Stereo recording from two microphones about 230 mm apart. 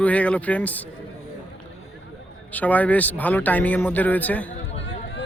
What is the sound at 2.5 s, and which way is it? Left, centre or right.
A man's voice, centre.